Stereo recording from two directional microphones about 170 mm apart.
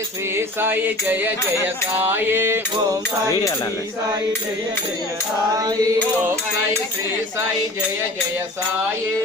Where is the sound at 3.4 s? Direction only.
20° left (ahead or behind).